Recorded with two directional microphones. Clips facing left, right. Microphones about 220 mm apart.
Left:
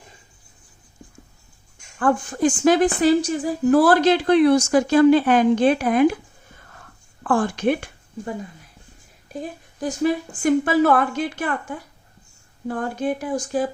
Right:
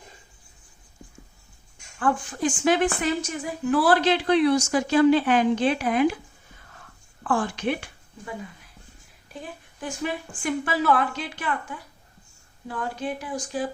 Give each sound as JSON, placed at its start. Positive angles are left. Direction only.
{"t": 2.0, "sound": "a woman's voice", "side_deg": 45}
{"t": 7.3, "sound": "speech", "side_deg": 45}
{"t": 9.3, "sound": "a woman's voice", "side_deg": 40}